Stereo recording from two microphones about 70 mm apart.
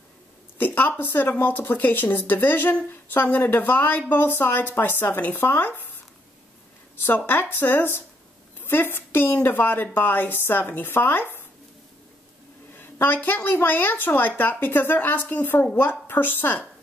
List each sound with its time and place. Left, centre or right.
0.6 s a woman's voice: left
7.1 s a woman's voice: left
12.7 s a woman's voice: left